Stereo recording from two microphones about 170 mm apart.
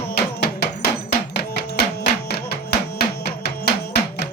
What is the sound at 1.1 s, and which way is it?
Music, 75° left (ahead or behind).